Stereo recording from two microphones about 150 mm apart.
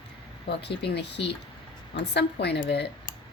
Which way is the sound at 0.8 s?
90° left.